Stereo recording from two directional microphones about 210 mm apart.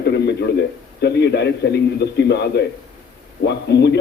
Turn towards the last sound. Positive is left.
turn(degrees=55)  # may be behind; listen again after turning